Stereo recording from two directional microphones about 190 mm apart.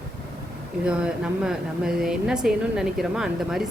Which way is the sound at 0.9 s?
5° right (ahead or behind).